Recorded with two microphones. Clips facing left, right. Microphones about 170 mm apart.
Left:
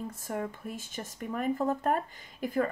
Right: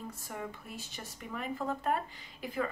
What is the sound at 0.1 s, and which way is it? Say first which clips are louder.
Speech: left 6 dB; 50° left (ahead or behind).